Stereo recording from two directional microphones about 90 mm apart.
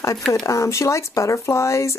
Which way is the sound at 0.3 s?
35° left (ahead or behind).